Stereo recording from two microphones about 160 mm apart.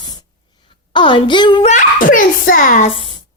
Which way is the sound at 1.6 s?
55° left (ahead or behind).